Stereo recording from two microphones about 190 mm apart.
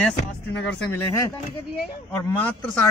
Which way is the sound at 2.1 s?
10° left (ahead or behind).